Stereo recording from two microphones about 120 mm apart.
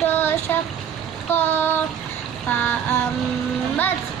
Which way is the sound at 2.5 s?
15° left (ahead or behind).